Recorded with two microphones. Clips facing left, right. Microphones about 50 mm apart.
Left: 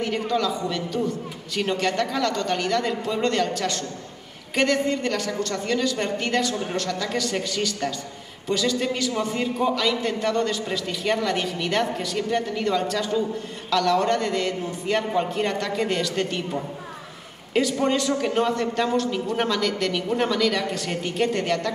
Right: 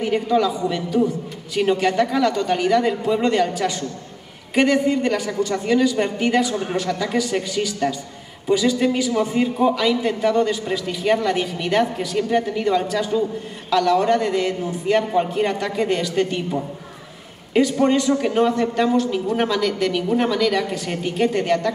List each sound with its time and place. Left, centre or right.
0.0 s a man's voice: centre